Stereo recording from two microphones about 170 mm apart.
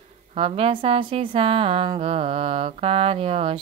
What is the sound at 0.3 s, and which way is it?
A woman's voice, 35° right (ahead or behind).